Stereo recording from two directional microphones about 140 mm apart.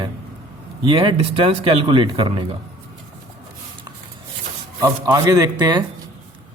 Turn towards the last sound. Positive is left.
turn(degrees=-30)  # may be behind; listen again after turning